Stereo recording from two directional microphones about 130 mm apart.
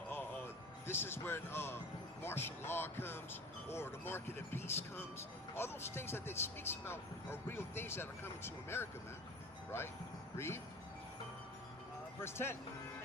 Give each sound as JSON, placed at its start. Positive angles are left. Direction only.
{"t": 0.1, "sound": "music", "side_deg": 15}
{"t": 2.2, "sound": "speech", "side_deg": 15}
{"t": 10.3, "sound": "speech", "side_deg": 20}
{"t": 12.2, "sound": "speech", "side_deg": 20}